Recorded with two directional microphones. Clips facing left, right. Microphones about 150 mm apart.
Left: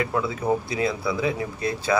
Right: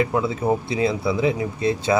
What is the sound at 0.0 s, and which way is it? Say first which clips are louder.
Speech: right 4 dB; 25° right (ahead or behind).